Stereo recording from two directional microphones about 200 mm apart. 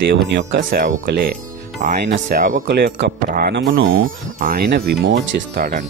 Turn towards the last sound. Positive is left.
turn(degrees=-50)  # may be behind; listen again after turning